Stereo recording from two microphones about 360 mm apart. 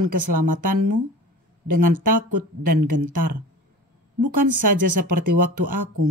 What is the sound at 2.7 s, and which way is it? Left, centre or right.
Speech, right.